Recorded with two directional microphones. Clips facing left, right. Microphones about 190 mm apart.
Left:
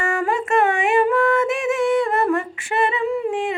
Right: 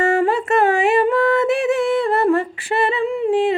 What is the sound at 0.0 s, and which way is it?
Yodeling, 35° right (ahead or behind).